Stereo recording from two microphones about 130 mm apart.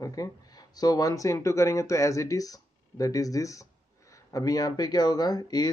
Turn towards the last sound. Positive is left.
turn(degrees=30)  # may be behind; listen again after turning